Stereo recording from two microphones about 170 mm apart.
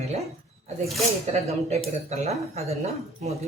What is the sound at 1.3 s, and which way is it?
Speech, 40° right (ahead or behind).